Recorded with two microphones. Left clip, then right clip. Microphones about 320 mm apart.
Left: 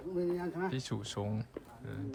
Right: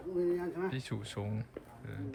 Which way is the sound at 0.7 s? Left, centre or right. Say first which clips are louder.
Left 1 dB; centre.